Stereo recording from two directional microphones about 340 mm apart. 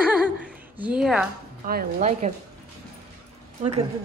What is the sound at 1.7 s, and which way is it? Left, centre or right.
Speech, right.